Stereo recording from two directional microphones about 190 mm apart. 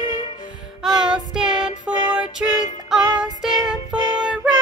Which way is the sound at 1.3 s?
5° right (ahead or behind).